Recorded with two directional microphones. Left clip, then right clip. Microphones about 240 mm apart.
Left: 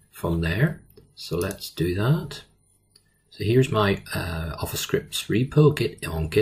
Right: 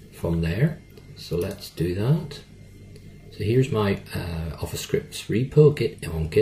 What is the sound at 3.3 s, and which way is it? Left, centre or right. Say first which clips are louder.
Speech: left 2 dB; left.